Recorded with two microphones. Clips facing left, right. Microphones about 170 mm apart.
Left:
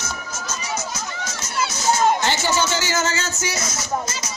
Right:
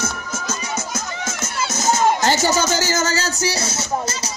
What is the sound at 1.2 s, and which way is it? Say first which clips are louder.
Crowd: left 2 dB; 45° right (ahead or behind).